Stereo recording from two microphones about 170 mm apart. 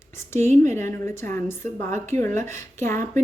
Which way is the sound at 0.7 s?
15° left (ahead or behind).